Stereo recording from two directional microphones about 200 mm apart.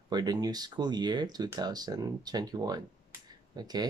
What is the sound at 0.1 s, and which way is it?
Speech, 20° right (ahead or behind).